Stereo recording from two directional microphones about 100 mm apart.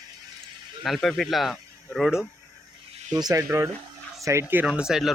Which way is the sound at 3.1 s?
40° right (ahead or behind).